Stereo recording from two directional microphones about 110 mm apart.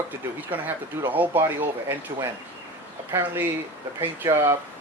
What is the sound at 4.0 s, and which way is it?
Speech, 25° right (ahead or behind).